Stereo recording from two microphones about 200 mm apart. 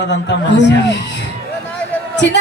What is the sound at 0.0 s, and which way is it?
Speech, 60° left (ahead or behind).